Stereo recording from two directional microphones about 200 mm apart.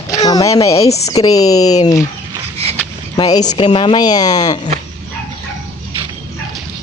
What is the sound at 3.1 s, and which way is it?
Speech, 20° left (ahead or behind).